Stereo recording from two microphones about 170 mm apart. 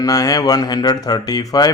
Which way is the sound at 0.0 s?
20° left (ahead or behind).